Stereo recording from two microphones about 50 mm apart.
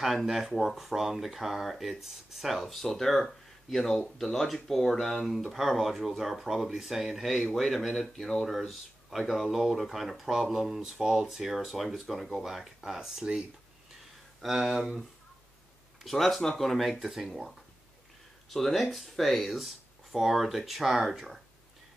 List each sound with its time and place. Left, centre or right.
0.0 s speech: centre
8.5 s speech: centre
14.4 s speech: centre
16.0 s speech: centre
18.5 s speech: centre